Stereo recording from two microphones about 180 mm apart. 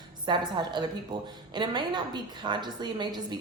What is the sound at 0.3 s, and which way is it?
A woman's voice, 25° right (ahead or behind).